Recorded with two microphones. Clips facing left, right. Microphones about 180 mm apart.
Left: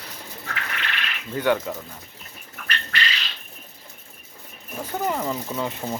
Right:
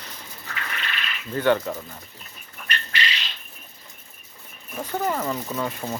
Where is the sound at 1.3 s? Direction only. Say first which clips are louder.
Right 1 dB; 10° left (ahead or behind).